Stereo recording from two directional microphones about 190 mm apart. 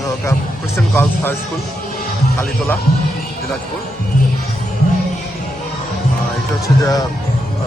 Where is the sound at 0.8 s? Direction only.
10° left (ahead or behind).